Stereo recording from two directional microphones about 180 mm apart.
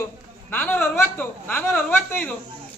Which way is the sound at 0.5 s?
10° left (ahead or behind).